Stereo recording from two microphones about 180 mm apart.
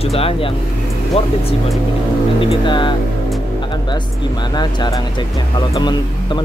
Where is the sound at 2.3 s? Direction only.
25° left (ahead or behind).